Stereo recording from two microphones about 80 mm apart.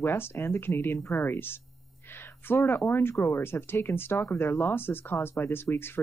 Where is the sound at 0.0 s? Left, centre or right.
Left.